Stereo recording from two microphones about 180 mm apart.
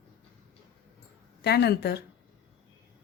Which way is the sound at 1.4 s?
65° left (ahead or behind).